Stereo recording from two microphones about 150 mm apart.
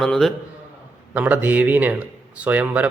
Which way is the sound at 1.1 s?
10° right (ahead or behind).